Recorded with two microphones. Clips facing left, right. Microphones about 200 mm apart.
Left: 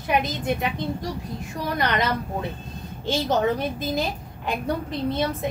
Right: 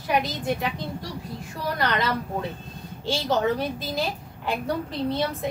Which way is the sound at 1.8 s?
20° left (ahead or behind).